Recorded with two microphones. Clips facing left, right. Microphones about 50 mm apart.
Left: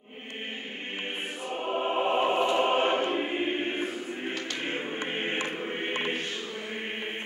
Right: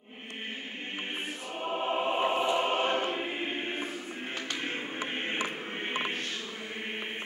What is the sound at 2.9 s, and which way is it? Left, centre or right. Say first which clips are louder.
Choir: left 3 dB; centre.